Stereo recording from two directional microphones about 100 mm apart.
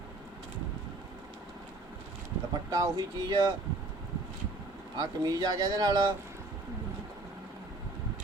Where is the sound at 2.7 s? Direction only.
40° right (ahead or behind).